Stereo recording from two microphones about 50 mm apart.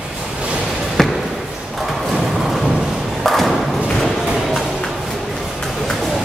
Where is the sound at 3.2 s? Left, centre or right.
Centre.